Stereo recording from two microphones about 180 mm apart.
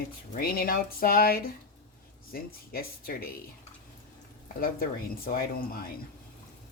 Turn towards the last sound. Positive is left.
turn(degrees=55)  # may be behind; listen again after turning